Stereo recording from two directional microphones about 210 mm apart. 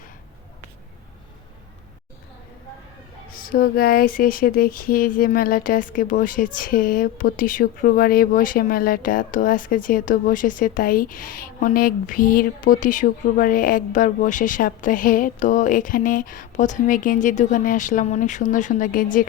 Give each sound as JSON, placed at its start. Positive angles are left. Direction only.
{"t": 3.2, "sound": "speech", "side_deg": 45}